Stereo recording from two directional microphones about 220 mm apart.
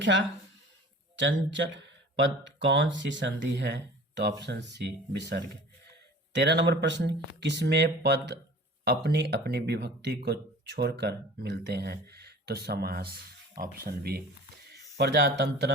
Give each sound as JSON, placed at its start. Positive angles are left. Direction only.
{"t": 0.0, "sound": "speech", "side_deg": -55}